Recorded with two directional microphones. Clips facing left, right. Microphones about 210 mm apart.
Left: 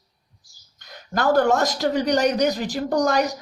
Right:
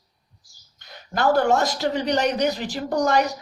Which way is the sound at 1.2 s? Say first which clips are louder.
Left 1 dB; 45° left (ahead or behind).